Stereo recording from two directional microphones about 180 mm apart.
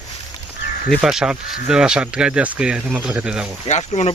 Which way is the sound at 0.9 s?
Centre (ahead or behind).